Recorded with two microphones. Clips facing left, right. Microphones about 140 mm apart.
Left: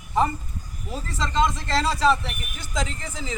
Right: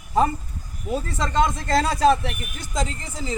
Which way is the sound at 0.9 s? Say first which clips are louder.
Right 2 dB; 50° right (ahead or behind).